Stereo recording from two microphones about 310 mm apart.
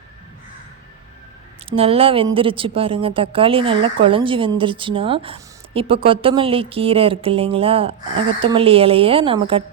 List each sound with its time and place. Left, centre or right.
1.7 s a woman's voice: centre